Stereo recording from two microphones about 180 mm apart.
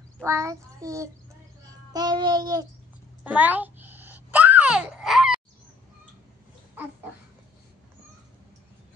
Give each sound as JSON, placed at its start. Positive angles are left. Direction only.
{"t": 0.2, "sound": "child singing", "side_deg": -15}
{"t": 1.7, "sound": "music", "side_deg": -20}
{"t": 3.3, "sound": "babbling", "side_deg": -10}